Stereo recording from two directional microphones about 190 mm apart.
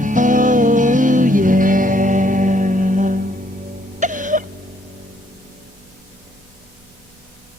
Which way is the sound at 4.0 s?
45° right (ahead or behind).